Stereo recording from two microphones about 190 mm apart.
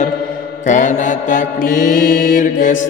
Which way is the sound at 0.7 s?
40° left (ahead or behind).